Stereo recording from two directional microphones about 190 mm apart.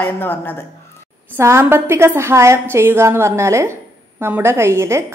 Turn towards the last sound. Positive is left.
turn(degrees=-15)  # may be behind; listen again after turning